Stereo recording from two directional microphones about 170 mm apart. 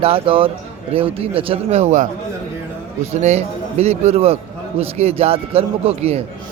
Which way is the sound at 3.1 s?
40° right (ahead or behind).